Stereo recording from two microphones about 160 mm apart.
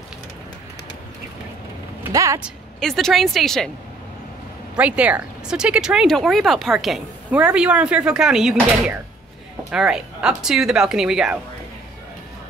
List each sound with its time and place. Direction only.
2.0 s speech: 20° right (ahead or behind)
2.4 s speech: centre (ahead or behind)
4.7 s speech: 10° right (ahead or behind)